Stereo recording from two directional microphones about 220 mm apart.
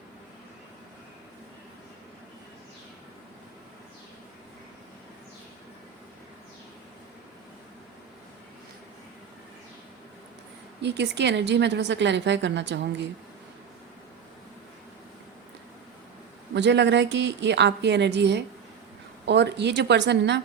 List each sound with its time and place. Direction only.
10.8 s a woman's voice: 50° right (ahead or behind)
16.6 s a woman's voice: 50° right (ahead or behind)